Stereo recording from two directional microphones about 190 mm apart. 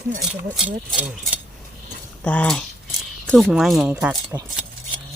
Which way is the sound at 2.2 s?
5° left (ahead or behind).